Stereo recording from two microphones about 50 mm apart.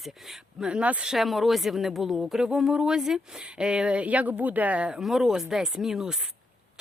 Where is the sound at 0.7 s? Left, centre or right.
Right.